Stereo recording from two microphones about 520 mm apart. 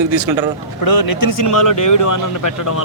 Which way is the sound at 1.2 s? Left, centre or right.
Left.